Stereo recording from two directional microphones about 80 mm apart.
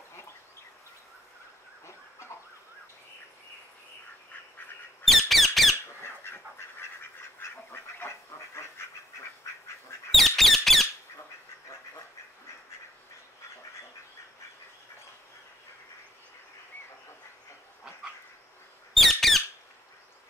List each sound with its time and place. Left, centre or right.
5.0 s squeak: centre
6.0 s duck: left
10.1 s squawk: centre
18.9 s squawk: centre